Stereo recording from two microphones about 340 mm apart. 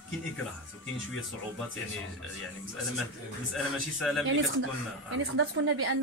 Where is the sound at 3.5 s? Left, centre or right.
Centre.